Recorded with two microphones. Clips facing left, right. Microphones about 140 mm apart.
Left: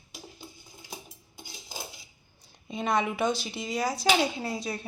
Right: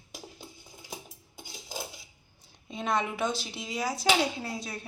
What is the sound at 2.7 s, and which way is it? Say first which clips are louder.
Speech: left 2 dB; centre (ahead or behind).